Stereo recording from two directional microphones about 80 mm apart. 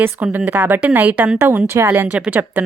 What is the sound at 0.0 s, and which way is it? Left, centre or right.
Speech, right.